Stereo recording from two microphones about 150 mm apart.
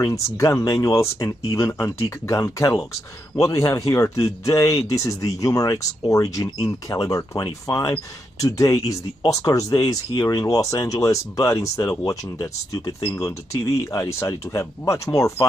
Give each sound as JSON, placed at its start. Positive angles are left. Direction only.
{"t": 0.0, "sound": "speech", "side_deg": 20}